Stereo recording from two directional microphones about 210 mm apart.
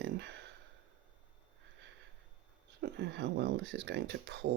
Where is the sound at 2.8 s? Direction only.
55° right (ahead or behind).